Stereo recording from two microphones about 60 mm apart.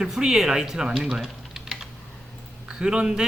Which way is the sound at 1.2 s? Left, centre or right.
Centre.